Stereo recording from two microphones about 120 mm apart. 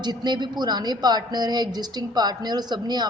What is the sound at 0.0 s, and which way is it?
Speech, 35° right (ahead or behind).